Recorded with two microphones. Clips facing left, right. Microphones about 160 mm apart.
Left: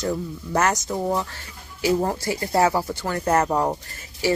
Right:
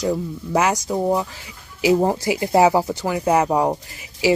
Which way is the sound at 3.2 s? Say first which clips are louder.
Right 3 dB; 10° right (ahead or behind).